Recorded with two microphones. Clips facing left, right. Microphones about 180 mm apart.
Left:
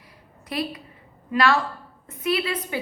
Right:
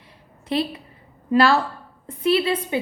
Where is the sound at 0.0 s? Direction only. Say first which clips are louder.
Right 1 dB; 25° right (ahead or behind).